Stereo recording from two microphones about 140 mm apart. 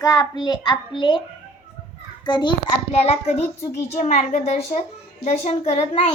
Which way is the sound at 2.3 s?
35° left (ahead or behind).